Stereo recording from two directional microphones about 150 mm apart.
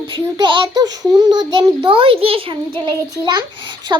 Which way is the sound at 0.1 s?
35° right (ahead or behind).